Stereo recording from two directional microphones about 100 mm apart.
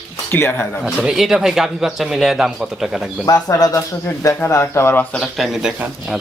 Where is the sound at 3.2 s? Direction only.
40° left (ahead or behind).